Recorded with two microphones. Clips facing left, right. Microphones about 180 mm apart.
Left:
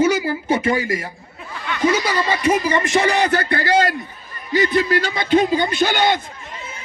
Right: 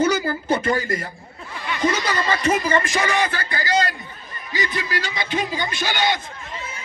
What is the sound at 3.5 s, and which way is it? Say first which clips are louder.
A man's voice: left 5 dB; 60° left (ahead or behind).